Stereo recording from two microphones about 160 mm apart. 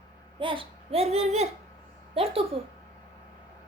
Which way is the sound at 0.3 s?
35° right (ahead or behind).